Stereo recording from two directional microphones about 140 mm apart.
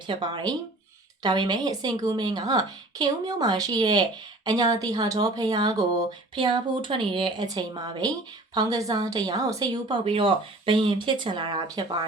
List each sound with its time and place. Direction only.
0.1 s speech: 35° right (ahead or behind)
10.0 s speech: 40° right (ahead or behind)